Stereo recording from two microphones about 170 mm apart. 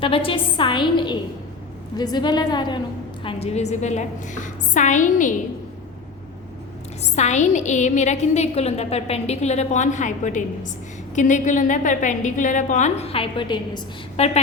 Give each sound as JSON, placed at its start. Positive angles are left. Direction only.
{"t": 0.0, "sound": "a woman's voice", "side_deg": 30}
{"t": 3.2, "sound": "a woman's voice", "side_deg": 40}
{"t": 7.2, "sound": "a woman's voice", "side_deg": 45}